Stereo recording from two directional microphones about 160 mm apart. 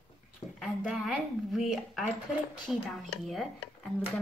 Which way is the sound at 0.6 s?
Centre (ahead or behind).